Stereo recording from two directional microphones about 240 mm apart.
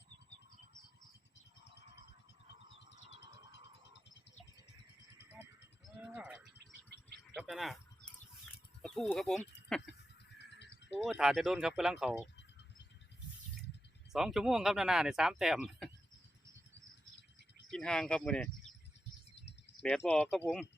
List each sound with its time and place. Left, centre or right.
2.7 s a sound: left
5.8 s gargling: centre
7.3 s speech: centre
8.8 s speech: centre
10.3 s bird: left
10.9 s speech: centre
14.1 s speech: centre
17.7 s speech: centre
19.4 s bird: left
19.8 s speech: centre